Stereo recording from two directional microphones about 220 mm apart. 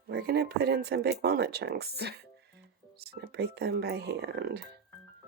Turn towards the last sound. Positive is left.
turn(degrees=-50)  # may be behind; listen again after turning